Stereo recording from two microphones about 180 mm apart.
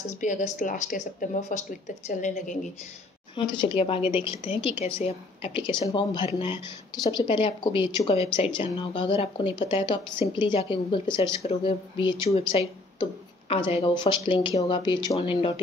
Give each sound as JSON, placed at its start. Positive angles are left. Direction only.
{"t": 0.2, "sound": "speech", "side_deg": 45}
{"t": 3.3, "sound": "a woman's voice", "side_deg": 25}